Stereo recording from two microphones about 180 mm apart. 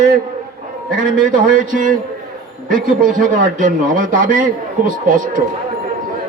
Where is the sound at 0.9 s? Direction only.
50° right (ahead or behind).